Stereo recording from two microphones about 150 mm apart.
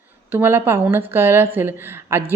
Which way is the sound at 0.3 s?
15° right (ahead or behind).